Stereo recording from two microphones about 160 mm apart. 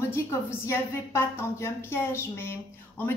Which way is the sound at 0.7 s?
15° left (ahead or behind).